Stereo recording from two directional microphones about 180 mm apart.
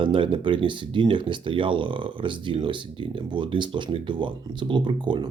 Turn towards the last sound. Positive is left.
turn(degrees=-25)  # may be behind; listen again after turning